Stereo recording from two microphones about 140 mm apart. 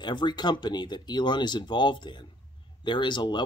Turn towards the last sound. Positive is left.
turn(degrees=35)  # may be behind; listen again after turning